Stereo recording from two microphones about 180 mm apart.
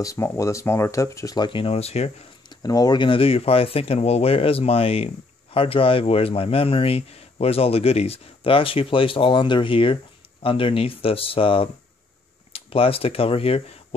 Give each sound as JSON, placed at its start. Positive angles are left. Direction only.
{"t": 0.0, "sound": "speech", "side_deg": 15}
{"t": 2.5, "sound": "speech", "side_deg": 20}